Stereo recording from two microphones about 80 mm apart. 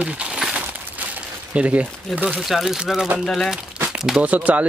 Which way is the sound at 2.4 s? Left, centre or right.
Centre.